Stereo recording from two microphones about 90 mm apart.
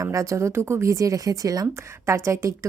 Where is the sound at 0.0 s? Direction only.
40° right (ahead or behind).